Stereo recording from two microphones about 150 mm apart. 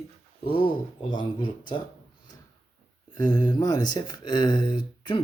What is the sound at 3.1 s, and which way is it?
Speech, 30° left (ahead or behind).